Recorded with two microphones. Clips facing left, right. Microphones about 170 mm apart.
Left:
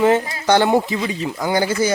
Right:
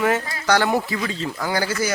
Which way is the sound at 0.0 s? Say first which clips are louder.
Left 5 dB; 25° left (ahead or behind).